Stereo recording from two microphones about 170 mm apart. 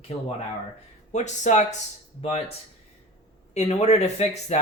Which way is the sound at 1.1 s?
45° left (ahead or behind).